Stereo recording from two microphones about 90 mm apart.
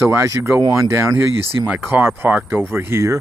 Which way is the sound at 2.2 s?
20° right (ahead or behind).